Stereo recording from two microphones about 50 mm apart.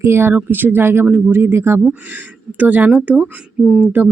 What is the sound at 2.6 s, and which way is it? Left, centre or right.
Speech, right.